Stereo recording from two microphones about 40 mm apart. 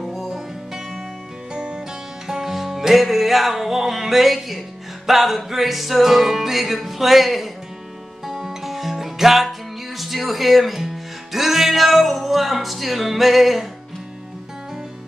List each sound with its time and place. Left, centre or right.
0.0 s music: centre
2.2 s music: centre